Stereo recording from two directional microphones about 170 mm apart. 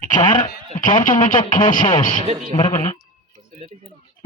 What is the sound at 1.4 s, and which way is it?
Speech, 30° left (ahead or behind).